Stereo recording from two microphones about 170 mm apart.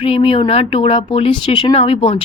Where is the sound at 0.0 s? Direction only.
35° left (ahead or behind).